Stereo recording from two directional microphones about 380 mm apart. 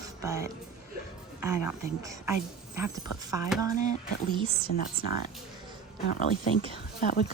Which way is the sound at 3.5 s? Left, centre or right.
Centre.